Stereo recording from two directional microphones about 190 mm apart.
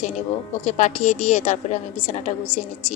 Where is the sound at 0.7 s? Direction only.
40° left (ahead or behind).